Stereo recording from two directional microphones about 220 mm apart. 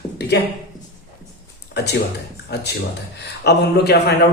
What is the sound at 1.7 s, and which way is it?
Speech, 50° left (ahead or behind).